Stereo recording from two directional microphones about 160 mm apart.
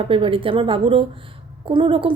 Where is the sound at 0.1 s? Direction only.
35° right (ahead or behind).